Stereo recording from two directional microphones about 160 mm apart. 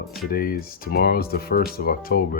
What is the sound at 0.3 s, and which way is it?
Speech, 65° left (ahead or behind).